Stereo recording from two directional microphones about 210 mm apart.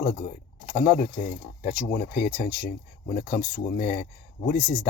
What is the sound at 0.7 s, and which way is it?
Speech, 45° left (ahead or behind).